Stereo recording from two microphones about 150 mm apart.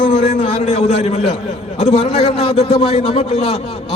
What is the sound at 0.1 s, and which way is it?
A man's voice, 50° left (ahead or behind).